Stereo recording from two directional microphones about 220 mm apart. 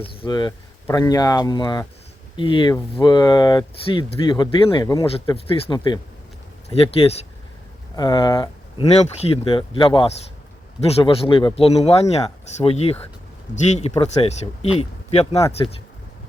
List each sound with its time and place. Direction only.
0.0 s speech: 20° left (ahead or behind)